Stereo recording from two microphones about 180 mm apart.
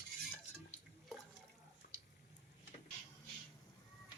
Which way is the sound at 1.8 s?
50° left (ahead or behind).